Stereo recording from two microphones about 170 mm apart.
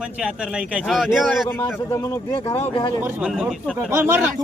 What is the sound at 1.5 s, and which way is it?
Speech, 15° left (ahead or behind).